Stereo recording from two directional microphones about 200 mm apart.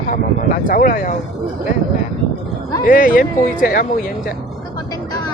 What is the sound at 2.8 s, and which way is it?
Speech, 45° left (ahead or behind).